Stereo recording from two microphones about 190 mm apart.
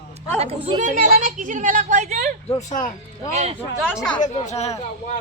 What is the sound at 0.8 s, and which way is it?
Speech, 40° right (ahead or behind).